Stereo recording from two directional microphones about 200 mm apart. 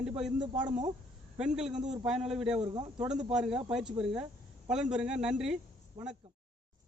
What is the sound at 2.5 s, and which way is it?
Speech, 25° right (ahead or behind).